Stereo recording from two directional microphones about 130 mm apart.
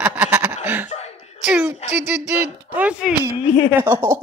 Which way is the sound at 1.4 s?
5° right (ahead or behind).